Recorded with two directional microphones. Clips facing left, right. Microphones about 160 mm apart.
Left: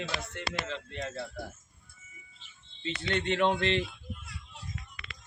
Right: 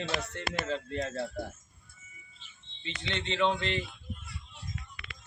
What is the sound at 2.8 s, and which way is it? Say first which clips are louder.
Speech: left 5 dB; 45° left (ahead or behind).